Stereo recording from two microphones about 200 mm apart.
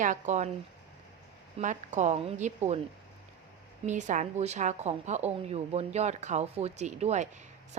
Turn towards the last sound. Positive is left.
turn(degrees=-35)  # may be behind; listen again after turning